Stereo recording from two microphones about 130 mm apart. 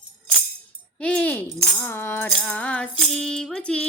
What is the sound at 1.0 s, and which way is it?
Music, 10° left (ahead or behind).